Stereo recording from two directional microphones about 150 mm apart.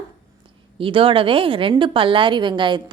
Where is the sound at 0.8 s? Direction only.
35° right (ahead or behind).